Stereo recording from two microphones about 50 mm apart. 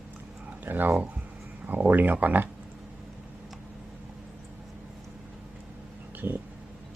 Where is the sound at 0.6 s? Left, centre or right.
Right.